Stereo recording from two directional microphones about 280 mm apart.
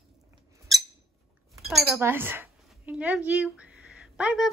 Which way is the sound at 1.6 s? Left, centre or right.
Centre.